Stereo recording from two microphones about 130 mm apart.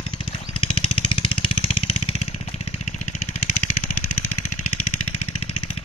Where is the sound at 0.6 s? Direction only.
45° left (ahead or behind).